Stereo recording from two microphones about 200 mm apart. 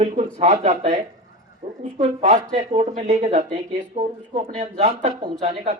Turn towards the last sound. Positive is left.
turn(degrees=-30)  # may be behind; listen again after turning